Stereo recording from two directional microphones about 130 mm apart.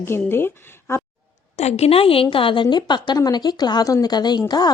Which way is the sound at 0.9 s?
20° left (ahead or behind).